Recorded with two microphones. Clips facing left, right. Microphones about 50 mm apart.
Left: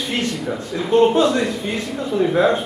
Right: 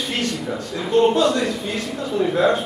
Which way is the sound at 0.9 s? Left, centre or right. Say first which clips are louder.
Left 2 dB; left.